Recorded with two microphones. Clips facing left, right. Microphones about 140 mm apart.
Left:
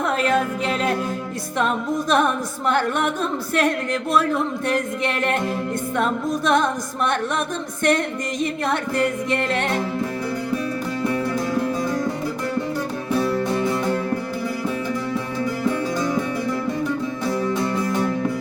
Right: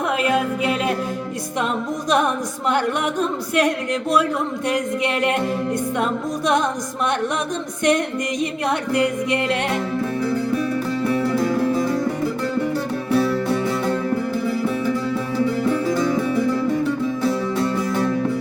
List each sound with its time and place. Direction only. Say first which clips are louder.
0.2 s music: right 1 dB; 10° right (ahead or behind)
4.7 s music: right 1 dB; 15° right (ahead or behind)
6.4 s music: even; 15° right (ahead or behind)
7.9 s music: right 2 dB; 15° right (ahead or behind)